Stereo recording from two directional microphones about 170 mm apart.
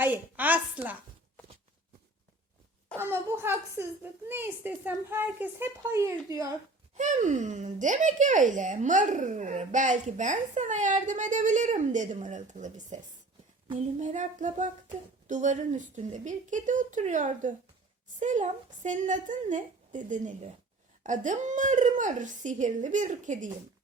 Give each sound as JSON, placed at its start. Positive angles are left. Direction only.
{"t": 0.0, "sound": "a woman's voice", "side_deg": -10}
{"t": 2.9, "sound": "speech", "side_deg": -15}
{"t": 6.9, "sound": "speech", "side_deg": -45}